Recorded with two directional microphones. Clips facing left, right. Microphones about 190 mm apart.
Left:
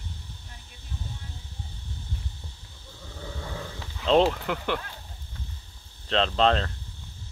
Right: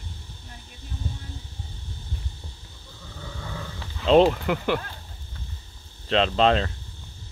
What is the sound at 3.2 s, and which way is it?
Vehicle, 30° left (ahead or behind).